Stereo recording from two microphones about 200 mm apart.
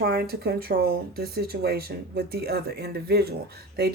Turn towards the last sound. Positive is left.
turn(degrees=-55)  # may be behind; listen again after turning